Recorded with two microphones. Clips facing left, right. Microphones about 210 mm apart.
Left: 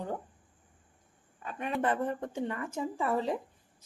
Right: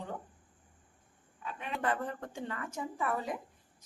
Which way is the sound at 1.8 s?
20° left (ahead or behind).